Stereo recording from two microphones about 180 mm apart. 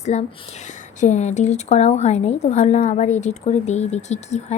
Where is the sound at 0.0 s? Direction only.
40° left (ahead or behind).